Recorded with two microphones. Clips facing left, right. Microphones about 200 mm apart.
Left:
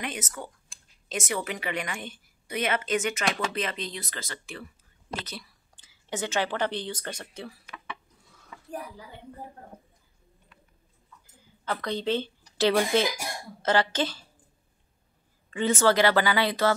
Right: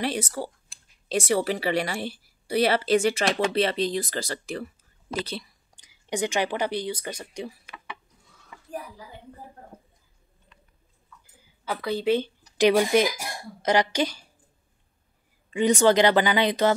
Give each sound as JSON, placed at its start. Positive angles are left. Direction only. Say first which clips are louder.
{"t": 0.0, "sound": "a woman's voice", "louder": "right 7 dB", "side_deg": -35}
{"t": 5.8, "sound": "speech", "louder": "right 5 dB", "side_deg": -15}
{"t": 11.6, "sound": "speech", "louder": "right 4 dB", "side_deg": -10}
{"t": 15.5, "sound": "speech", "louder": "right 4 dB", "side_deg": -15}